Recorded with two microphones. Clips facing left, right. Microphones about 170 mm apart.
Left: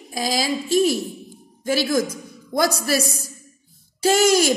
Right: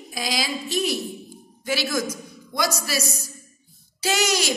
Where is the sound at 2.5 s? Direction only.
50° left (ahead or behind).